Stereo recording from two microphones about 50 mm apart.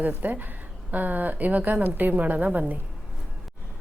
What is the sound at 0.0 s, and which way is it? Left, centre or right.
A woman's voice, right.